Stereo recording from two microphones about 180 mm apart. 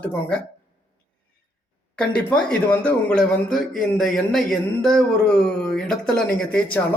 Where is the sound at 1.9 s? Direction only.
5° left (ahead or behind).